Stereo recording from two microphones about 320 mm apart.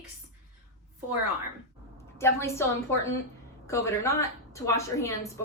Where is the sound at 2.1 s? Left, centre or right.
Centre.